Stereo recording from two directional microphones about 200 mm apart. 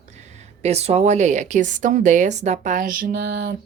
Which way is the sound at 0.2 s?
35° right (ahead or behind).